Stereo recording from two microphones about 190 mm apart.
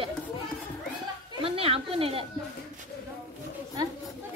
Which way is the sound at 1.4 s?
30° right (ahead or behind).